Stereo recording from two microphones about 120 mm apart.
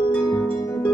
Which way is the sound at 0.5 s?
25° left (ahead or behind).